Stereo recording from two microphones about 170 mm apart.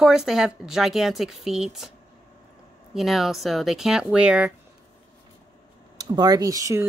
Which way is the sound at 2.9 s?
Centre (ahead or behind).